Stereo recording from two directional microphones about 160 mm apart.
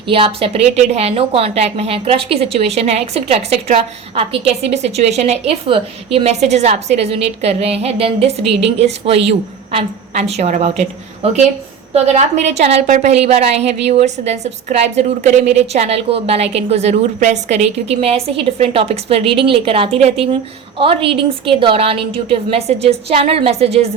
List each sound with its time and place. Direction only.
0.1 s a woman's voice: 35° right (ahead or behind)